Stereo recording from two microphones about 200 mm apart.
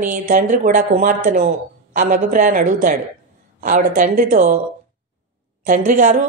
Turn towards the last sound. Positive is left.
turn(degrees=-40)  # may be behind; listen again after turning